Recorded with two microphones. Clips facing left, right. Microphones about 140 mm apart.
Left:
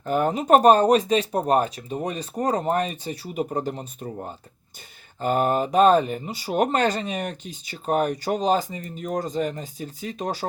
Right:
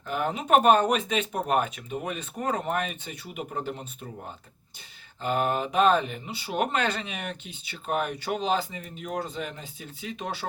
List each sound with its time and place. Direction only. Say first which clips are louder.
0.0 s speech: left 7 dB; 40° left (ahead or behind)
5.2 s speech: left 5 dB; 40° left (ahead or behind)